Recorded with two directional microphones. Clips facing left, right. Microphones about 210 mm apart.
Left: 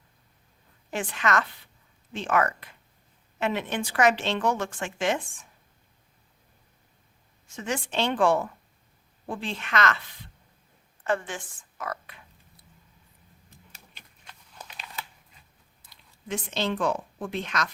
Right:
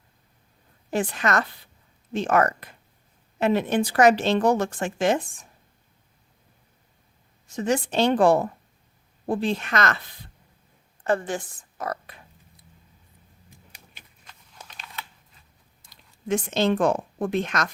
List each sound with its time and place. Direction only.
0.9 s speech: 35° right (ahead or behind)
7.4 s a woman's voice: 40° right (ahead or behind)
15.9 s a woman's voice: 45° right (ahead or behind)